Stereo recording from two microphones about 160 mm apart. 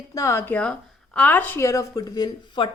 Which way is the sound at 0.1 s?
20° left (ahead or behind).